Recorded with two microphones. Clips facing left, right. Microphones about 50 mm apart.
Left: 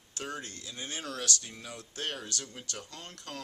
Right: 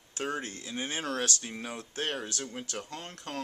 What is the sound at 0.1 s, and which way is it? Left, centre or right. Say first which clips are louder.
A man's voice: right 5 dB; right.